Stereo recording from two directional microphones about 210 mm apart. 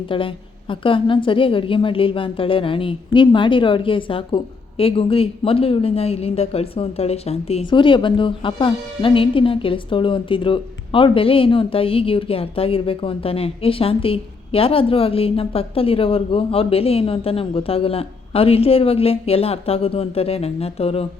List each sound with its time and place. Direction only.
0.1 s a woman's voice: 25° left (ahead or behind)